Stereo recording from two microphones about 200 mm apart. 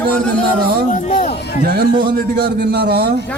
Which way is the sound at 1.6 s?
45° right (ahead or behind).